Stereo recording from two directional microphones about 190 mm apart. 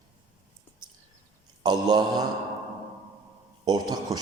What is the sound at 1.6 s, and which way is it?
Speech, 20° right (ahead or behind).